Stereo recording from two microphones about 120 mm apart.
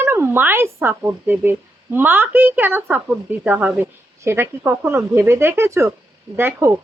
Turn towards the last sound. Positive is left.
turn(degrees=-20)  # may be behind; listen again after turning